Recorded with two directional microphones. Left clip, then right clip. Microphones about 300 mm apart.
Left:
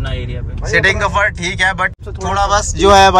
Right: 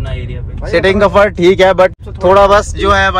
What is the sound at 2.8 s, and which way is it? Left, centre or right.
Speech, centre.